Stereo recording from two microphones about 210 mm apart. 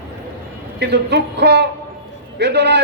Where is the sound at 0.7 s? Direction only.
55° right (ahead or behind).